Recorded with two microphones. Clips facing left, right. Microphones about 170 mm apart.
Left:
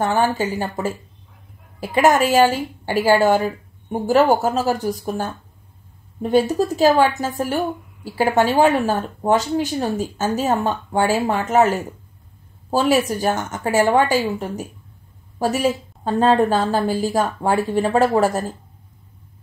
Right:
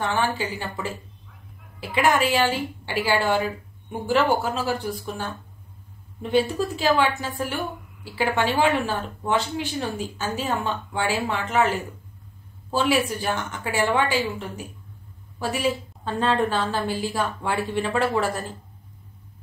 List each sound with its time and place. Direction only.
0.0 s a woman's voice: 45° left (ahead or behind)
6.5 s a woman's voice: 40° left (ahead or behind)